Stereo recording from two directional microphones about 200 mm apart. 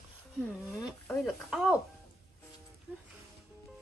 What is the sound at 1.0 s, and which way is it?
Speech, centre (ahead or behind).